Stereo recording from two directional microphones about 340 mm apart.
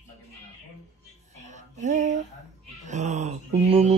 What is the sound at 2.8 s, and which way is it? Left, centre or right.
Mantra, right.